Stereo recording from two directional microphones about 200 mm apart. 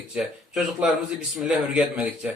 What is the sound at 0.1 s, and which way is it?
A man's voice, 5° right (ahead or behind).